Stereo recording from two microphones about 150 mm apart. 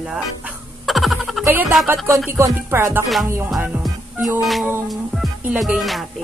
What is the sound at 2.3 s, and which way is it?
Speech, 15° right (ahead or behind).